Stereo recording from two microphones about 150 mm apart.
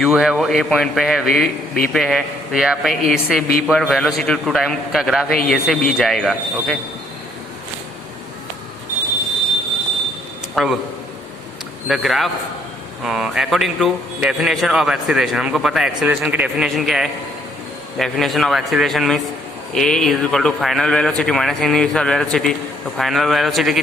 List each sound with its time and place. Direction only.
0.0 s a man's voice: 5° right (ahead or behind)
10.5 s speech: centre (ahead or behind)
11.9 s a man's voice: centre (ahead or behind)